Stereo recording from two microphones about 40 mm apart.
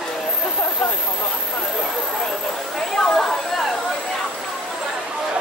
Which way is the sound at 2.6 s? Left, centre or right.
Centre.